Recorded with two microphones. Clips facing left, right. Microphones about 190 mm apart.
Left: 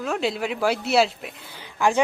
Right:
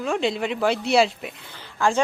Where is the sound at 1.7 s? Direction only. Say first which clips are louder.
Left 1 dB; 15° left (ahead or behind).